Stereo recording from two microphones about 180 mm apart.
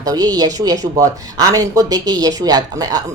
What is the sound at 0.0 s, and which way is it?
Speech, 20° right (ahead or behind).